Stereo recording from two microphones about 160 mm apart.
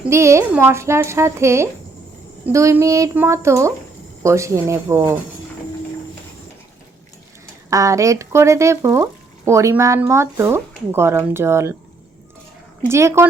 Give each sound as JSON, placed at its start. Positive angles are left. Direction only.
{"t": 0.0, "sound": "speech", "side_deg": -15}
{"t": 7.7, "sound": "speech", "side_deg": -20}
{"t": 12.9, "sound": "speech", "side_deg": -15}